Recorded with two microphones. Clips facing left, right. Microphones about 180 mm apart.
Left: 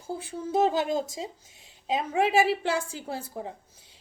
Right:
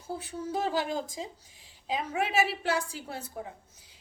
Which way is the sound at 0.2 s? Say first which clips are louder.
Left 9 dB; 25° left (ahead or behind).